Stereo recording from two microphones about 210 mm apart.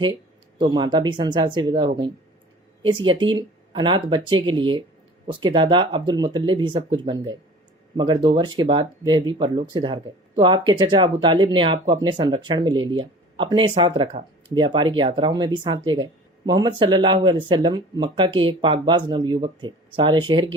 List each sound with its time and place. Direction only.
0.6 s speech: 20° right (ahead or behind)